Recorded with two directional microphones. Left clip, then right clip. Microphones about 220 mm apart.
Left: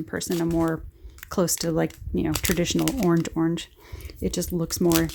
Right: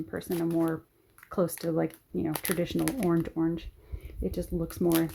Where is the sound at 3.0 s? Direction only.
45° left (ahead or behind).